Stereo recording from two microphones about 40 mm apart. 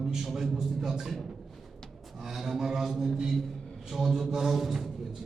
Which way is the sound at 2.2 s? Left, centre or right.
Centre.